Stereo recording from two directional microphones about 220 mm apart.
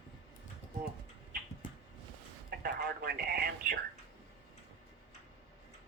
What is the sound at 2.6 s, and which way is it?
Telephone, 45° right (ahead or behind).